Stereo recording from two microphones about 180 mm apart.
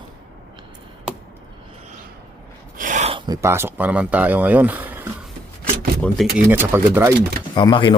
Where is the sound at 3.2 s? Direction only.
20° right (ahead or behind).